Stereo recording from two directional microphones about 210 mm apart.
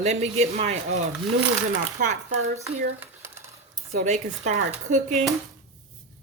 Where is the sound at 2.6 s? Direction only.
10° right (ahead or behind).